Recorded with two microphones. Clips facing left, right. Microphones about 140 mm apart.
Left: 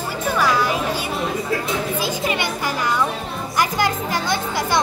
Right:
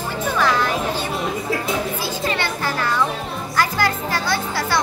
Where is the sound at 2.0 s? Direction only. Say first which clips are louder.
Left 1 dB; 15° left (ahead or behind).